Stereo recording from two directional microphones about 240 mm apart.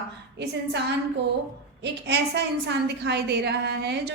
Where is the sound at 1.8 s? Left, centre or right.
Right.